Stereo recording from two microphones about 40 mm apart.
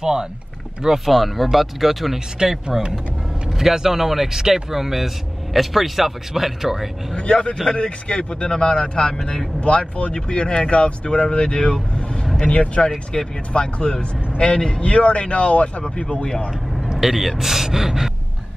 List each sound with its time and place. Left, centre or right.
0.0 s speech: centre
0.8 s speech: centre
7.7 s speech: left
17.0 s speech: centre